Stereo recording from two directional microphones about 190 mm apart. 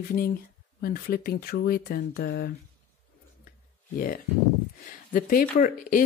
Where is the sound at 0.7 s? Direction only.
55° left (ahead or behind).